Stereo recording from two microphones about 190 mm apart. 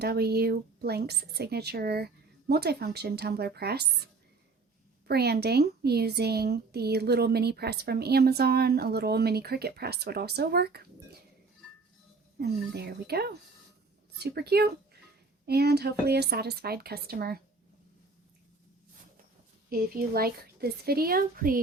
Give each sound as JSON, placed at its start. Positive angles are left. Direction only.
{"t": 0.0, "sound": "speech", "side_deg": -55}
{"t": 12.4, "sound": "speech", "side_deg": -55}
{"t": 19.7, "sound": "a woman's voice", "side_deg": -55}